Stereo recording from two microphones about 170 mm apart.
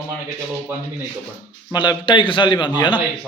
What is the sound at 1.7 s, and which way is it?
A man's voice, 25° left (ahead or behind).